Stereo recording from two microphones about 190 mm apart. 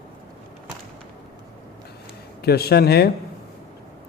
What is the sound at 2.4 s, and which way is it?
Speech, 55° left (ahead or behind).